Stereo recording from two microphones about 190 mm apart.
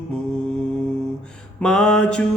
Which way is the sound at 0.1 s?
5° left (ahead or behind).